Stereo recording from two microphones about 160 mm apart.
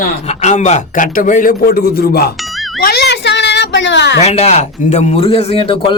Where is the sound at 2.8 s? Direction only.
85° left.